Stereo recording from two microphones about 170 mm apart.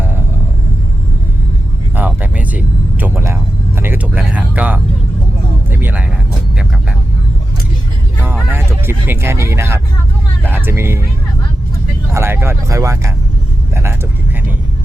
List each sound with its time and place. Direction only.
2.0 s vehicle: 10° right (ahead or behind)
5.7 s music: 10° right (ahead or behind)
8.4 s vehicle: 15° right (ahead or behind)
10.4 s speech: 10° right (ahead or behind)
12.1 s speech: 15° right (ahead or behind)